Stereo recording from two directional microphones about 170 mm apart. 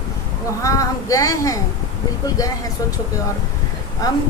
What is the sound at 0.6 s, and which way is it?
Speech, 20° left (ahead or behind).